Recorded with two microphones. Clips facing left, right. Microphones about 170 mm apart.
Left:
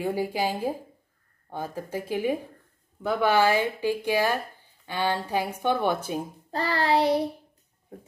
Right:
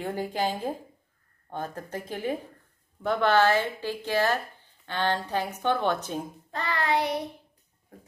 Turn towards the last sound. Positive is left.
turn(degrees=30)  # may be behind; listen again after turning